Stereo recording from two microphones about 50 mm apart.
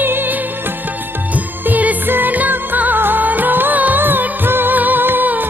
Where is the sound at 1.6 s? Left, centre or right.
Right.